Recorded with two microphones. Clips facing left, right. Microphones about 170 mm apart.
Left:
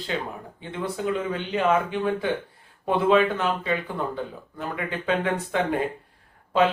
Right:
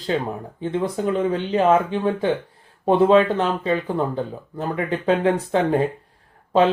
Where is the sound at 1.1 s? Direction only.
35° right (ahead or behind).